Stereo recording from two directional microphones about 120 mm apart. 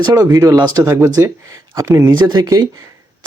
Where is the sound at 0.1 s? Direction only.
30° right (ahead or behind).